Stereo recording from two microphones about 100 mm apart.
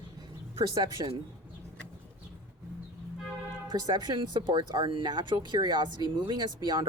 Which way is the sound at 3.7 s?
45° right (ahead or behind).